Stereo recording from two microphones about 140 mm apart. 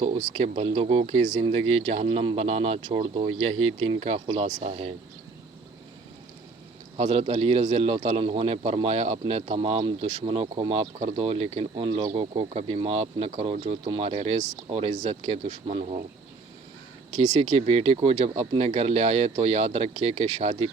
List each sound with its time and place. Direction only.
0.0 s speech: 35° right (ahead or behind)
4.6 s a man's voice: 50° right (ahead or behind)
6.9 s a man's voice: 45° right (ahead or behind)
17.2 s a man's voice: 50° right (ahead or behind)